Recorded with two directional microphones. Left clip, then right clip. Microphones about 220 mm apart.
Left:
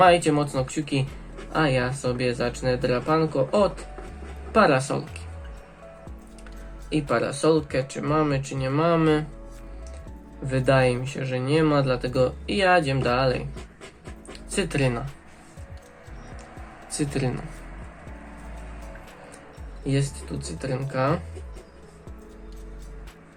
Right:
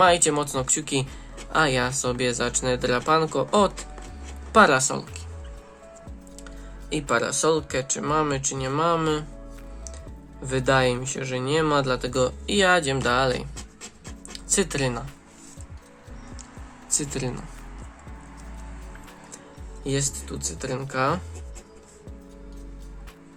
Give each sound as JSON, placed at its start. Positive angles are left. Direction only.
{"t": 0.0, "sound": "speech", "side_deg": -25}
{"t": 6.9, "sound": "speech", "side_deg": -25}
{"t": 10.4, "sound": "speech", "side_deg": -25}
{"t": 14.5, "sound": "speech", "side_deg": -25}
{"t": 16.9, "sound": "speech", "side_deg": -15}
{"t": 19.8, "sound": "speech", "side_deg": -25}